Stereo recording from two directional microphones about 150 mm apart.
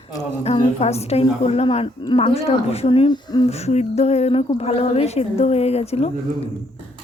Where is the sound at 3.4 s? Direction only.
45° left (ahead or behind).